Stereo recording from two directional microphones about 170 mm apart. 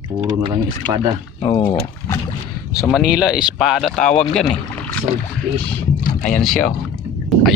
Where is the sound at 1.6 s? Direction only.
20° left (ahead or behind).